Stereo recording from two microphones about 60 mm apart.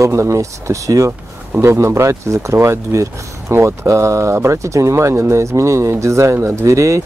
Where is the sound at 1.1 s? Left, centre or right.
Right.